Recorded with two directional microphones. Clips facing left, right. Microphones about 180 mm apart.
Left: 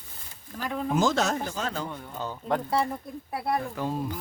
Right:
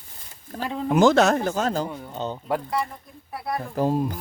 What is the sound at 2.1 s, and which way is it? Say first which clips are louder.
Speech: right 5 dB; 25° right (ahead or behind).